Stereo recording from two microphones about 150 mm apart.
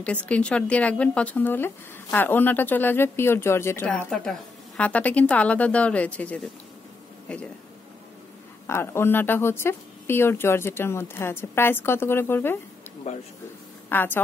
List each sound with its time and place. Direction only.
0.0 s speech: 10° left (ahead or behind)
8.6 s speech: 15° left (ahead or behind)
13.8 s a woman's voice: 15° left (ahead or behind)